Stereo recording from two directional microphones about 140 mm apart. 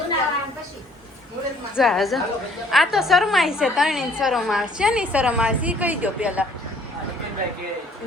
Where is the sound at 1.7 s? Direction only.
Centre (ahead or behind).